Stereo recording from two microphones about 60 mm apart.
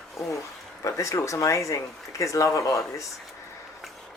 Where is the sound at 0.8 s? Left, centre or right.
Left.